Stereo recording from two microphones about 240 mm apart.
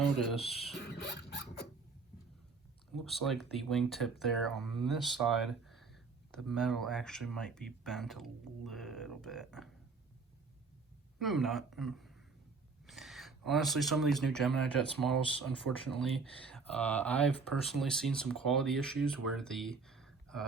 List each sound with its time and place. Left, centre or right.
0.2 s speech: centre
0.9 s a sound: left
2.9 s speech: centre
11.2 s speech: centre